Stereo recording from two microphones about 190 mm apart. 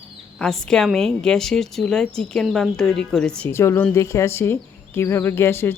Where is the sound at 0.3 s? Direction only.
5° left (ahead or behind).